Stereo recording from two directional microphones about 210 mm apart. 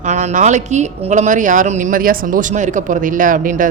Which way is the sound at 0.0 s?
35° right (ahead or behind).